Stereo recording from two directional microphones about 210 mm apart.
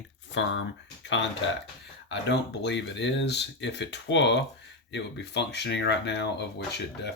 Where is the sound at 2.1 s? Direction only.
55° left (ahead or behind).